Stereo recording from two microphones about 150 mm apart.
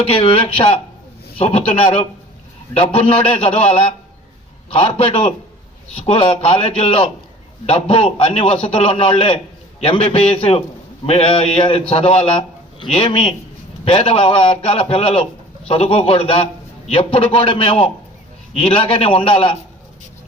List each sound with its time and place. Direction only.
0.0 s a man's voice: 35° left (ahead or behind)